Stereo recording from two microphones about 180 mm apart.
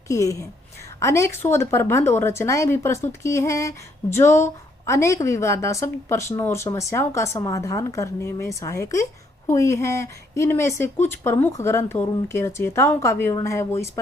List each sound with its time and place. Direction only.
0.1 s speech: 15° left (ahead or behind)